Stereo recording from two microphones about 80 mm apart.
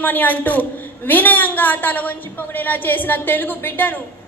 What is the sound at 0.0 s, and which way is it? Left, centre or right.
A woman's voice, left.